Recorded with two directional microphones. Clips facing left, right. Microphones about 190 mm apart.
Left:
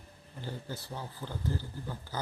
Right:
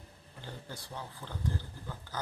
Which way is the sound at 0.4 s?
5° left (ahead or behind).